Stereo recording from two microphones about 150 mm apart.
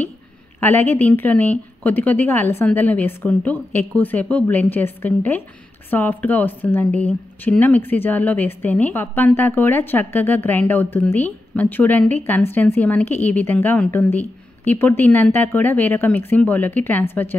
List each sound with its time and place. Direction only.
0.6 s a woman's voice: 15° left (ahead or behind)